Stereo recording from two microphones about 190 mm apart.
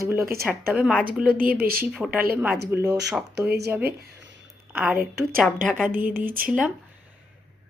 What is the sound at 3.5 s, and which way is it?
Speech, 60° right (ahead or behind).